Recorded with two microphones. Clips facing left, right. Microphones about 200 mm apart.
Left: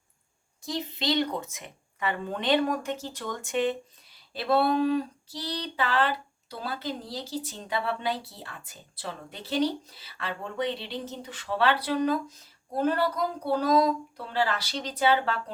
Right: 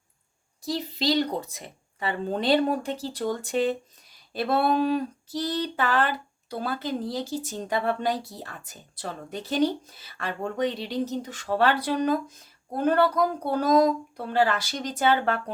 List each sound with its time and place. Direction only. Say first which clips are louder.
0.6 s a woman's voice: right 4 dB; 35° right (ahead or behind)
4.4 s speech: right 1 dB; 50° right (ahead or behind)